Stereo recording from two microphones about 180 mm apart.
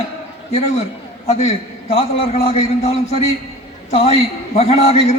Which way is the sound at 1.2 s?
35° left (ahead or behind).